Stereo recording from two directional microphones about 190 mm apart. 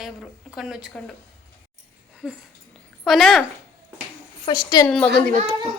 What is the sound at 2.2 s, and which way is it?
A woman's voice, 5° right (ahead or behind).